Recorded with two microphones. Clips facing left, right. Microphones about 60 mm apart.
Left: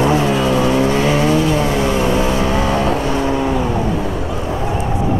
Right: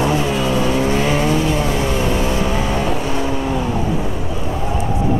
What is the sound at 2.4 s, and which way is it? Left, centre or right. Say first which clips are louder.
Vehicle: left 3 dB; centre.